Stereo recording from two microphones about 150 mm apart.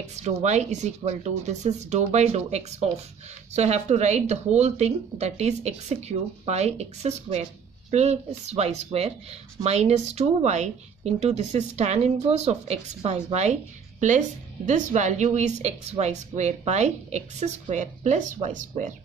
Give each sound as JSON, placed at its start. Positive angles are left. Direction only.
{"t": 0.0, "sound": "a woman's voice", "side_deg": -50}